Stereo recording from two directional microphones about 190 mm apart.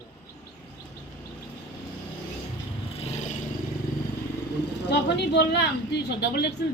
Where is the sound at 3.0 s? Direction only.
35° left (ahead or behind).